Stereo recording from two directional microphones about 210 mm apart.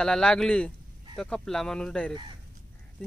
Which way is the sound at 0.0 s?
5° left (ahead or behind).